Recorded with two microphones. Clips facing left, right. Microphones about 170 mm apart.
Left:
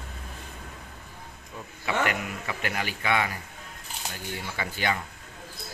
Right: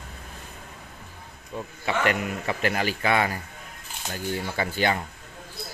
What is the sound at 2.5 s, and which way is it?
Speech, 35° right (ahead or behind).